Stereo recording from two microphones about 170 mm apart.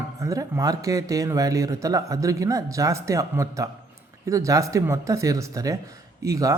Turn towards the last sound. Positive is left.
turn(degrees=-20)  # may be behind; listen again after turning